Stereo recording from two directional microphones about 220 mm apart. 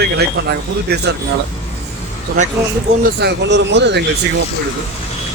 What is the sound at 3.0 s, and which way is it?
Speech, 50° right (ahead or behind).